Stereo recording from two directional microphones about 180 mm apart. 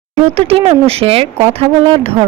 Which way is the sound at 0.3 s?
35° right (ahead or behind).